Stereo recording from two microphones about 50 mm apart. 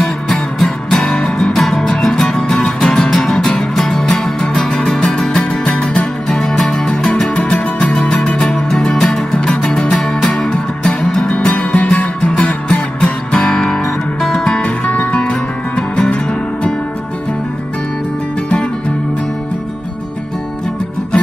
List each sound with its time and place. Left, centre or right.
0.0 s music: centre
14.9 s music: left